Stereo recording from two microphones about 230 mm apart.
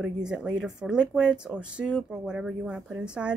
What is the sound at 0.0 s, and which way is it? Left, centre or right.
Speech, centre.